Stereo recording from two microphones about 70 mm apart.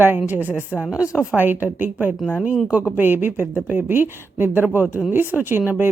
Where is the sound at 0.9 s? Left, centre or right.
Centre.